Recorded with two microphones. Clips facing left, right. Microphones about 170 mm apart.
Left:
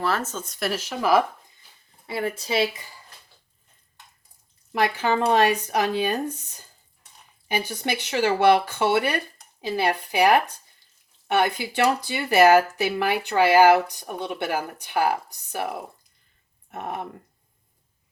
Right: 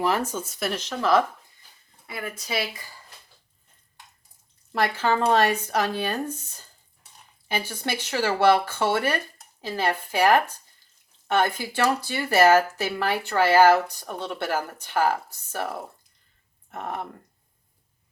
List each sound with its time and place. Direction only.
0.0 s speech: 15° right (ahead or behind); by 1.2 s 10° left (ahead or behind)
2.0 s speech: 30° left (ahead or behind)
4.7 s speech: 15° left (ahead or behind)